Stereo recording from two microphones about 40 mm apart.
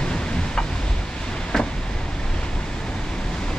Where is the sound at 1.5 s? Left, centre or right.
Centre.